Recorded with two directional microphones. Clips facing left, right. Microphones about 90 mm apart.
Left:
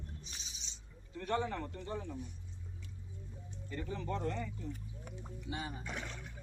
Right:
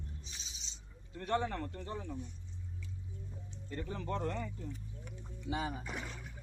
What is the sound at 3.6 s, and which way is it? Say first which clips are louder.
Speech: even; 55° right (ahead or behind).